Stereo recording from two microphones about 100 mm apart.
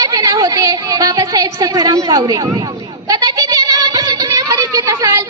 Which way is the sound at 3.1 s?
40° right (ahead or behind).